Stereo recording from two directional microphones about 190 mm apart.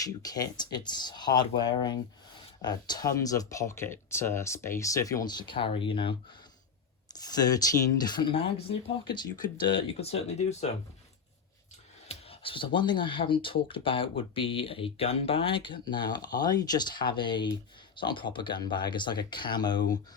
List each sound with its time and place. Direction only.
0.0 s speech: 20° left (ahead or behind); by 10.7 s 35° left (ahead or behind)
12.0 s speech: 30° left (ahead or behind)